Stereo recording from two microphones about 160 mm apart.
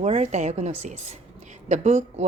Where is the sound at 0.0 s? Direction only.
45° right (ahead or behind).